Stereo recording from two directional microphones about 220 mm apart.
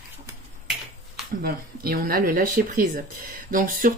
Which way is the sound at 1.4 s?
45° right (ahead or behind).